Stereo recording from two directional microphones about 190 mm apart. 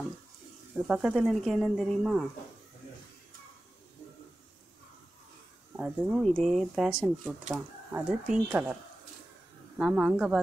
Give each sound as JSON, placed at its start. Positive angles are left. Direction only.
{"t": 0.8, "sound": "speech", "side_deg": -5}
{"t": 5.8, "sound": "speech", "side_deg": -5}
{"t": 9.8, "sound": "speech", "side_deg": -5}